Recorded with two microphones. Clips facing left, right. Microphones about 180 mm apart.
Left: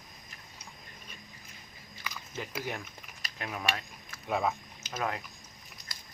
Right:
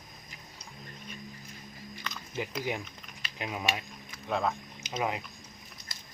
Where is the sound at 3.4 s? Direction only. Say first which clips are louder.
Right 2 dB; 15° right (ahead or behind).